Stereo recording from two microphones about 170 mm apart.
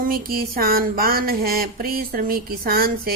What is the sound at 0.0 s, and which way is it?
A woman's voice, 60° right (ahead or behind).